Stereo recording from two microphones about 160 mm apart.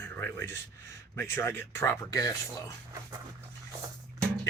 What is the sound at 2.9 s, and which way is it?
Dog, 20° right (ahead or behind).